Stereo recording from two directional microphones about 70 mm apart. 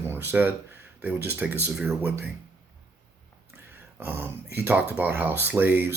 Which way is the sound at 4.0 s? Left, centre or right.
Right.